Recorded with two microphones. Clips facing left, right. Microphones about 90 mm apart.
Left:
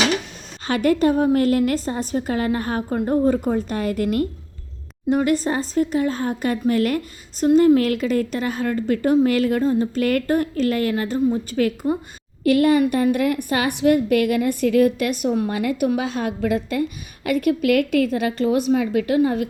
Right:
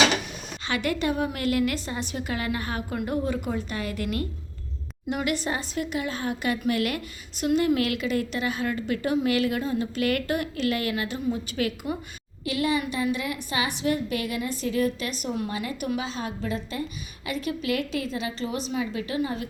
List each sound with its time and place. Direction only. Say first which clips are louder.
0.7 s speech: left 9 dB; 40° left (ahead or behind)
12.4 s a woman's voice: left 10 dB; 50° left (ahead or behind)